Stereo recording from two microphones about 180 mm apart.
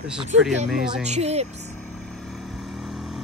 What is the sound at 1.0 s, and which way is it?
Speech, 35° right (ahead or behind).